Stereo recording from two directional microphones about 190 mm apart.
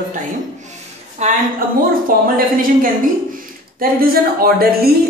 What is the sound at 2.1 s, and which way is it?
A woman's voice, 50° right (ahead or behind).